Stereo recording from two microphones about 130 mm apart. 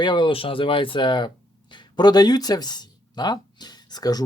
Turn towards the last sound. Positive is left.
turn(degrees=30)  # may be behind; listen again after turning